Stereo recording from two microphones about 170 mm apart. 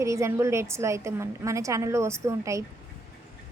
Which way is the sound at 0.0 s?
15° right (ahead or behind).